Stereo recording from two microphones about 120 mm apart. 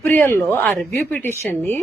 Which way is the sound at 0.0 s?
15° left (ahead or behind).